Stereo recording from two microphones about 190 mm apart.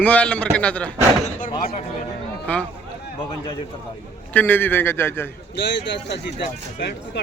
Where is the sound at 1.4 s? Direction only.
45° left (ahead or behind).